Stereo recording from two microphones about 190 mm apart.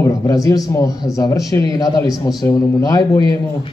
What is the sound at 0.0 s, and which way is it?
A man's voice, 20° left (ahead or behind).